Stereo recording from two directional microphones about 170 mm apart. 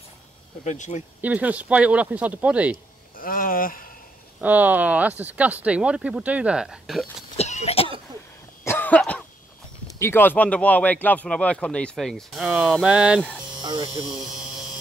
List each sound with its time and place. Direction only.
0.7 s speech: 45° left (ahead or behind)
1.2 s speech: 10° right (ahead or behind)
3.2 s speech: 55° left (ahead or behind)
4.4 s speech: 10° right (ahead or behind)
7.3 s cough: 40° left (ahead or behind)
8.6 s cough: 10° left (ahead or behind)
9.8 s speech: 15° left (ahead or behind); by 13.2 s 5° right (ahead or behind)
13.6 s electric shaver: 25° right (ahead or behind)
14.0 s a sound: centre (ahead or behind)